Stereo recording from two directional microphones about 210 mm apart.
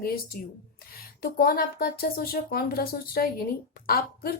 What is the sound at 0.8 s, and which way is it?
Speech, 45° left (ahead or behind).